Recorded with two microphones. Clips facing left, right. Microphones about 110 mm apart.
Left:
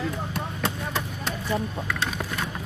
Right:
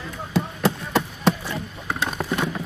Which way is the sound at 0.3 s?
85° right.